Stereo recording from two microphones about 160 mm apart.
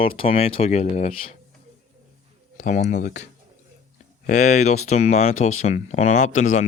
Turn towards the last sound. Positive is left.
turn(degrees=45)  # may be behind; listen again after turning